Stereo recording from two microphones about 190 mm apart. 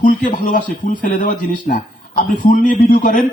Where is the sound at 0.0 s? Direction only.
45° left (ahead or behind).